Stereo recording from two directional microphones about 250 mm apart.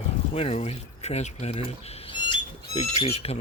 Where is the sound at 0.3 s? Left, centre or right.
Left.